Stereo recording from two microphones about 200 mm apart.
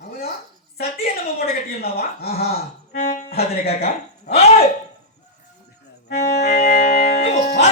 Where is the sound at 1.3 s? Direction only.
50° left (ahead or behind).